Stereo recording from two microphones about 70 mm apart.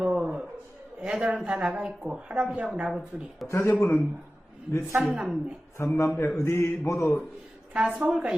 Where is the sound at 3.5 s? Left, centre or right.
Left.